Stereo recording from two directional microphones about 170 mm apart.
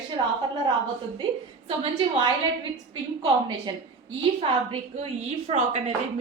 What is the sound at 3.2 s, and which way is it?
A woman's voice, 25° right (ahead or behind).